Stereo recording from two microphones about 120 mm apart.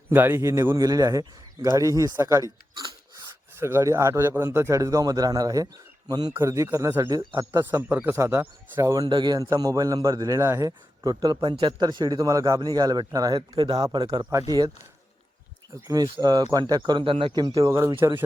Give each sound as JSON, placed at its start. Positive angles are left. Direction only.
{"t": 0.1, "sound": "a man's voice", "side_deg": -15}
{"t": 6.3, "sound": "a man's voice", "side_deg": -25}
{"t": 7.1, "sound": "a man's voice", "side_deg": -35}
{"t": 7.3, "sound": "a man's voice", "side_deg": -20}
{"t": 9.0, "sound": "a man's voice", "side_deg": -40}
{"t": 11.4, "sound": "a man's voice", "side_deg": -45}
{"t": 15.7, "sound": "a man's voice", "side_deg": -30}
{"t": 17.4, "sound": "a man's voice", "side_deg": -30}